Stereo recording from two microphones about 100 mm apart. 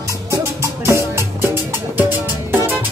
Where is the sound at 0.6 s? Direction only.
25° right (ahead or behind).